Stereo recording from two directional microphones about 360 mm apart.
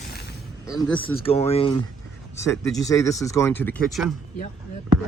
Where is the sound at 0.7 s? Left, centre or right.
Centre.